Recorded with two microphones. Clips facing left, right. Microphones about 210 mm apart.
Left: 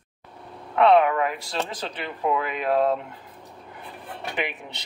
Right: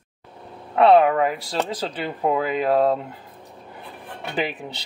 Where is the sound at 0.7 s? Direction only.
30° right (ahead or behind).